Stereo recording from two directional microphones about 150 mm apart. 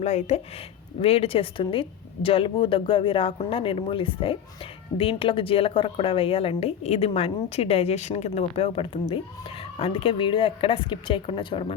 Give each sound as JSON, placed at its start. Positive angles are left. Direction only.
{"t": 0.0, "sound": "speech", "side_deg": 45}